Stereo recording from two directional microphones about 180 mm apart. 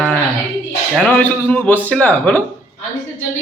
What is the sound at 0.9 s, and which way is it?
Speech, 10° left (ahead or behind).